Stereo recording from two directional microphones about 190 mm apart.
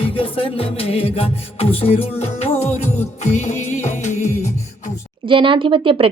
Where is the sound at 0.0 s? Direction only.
30° left (ahead or behind).